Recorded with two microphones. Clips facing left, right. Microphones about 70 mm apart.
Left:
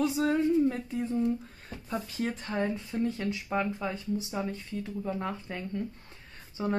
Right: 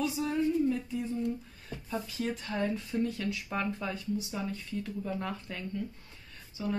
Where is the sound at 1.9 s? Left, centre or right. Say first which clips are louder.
Left 2 dB; left.